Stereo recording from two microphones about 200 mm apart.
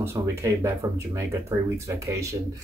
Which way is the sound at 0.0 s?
15° right (ahead or behind).